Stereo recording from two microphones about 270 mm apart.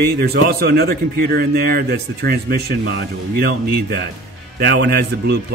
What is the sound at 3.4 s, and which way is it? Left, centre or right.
A man's voice, right.